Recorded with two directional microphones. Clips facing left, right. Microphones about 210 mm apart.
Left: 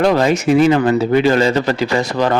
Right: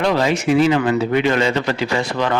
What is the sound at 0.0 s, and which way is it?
A man's voice, 45° left (ahead or behind).